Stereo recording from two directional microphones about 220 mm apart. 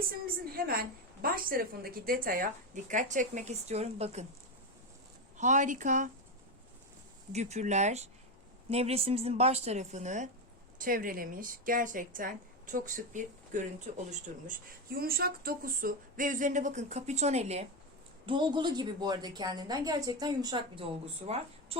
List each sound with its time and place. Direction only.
0.5 s a woman's voice: 40° right (ahead or behind)
5.4 s a woman's voice: 35° right (ahead or behind)
7.3 s a woman's voice: 30° right (ahead or behind)